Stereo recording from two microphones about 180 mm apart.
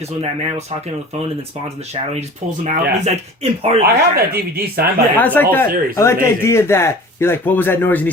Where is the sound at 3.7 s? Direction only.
35° right (ahead or behind).